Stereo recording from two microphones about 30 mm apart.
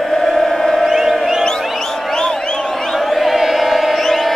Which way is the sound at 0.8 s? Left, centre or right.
Centre.